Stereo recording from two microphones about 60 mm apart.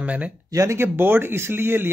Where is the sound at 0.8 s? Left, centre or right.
Right.